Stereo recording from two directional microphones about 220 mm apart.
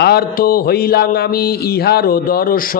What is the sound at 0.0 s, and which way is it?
Mantra, 45° left (ahead or behind).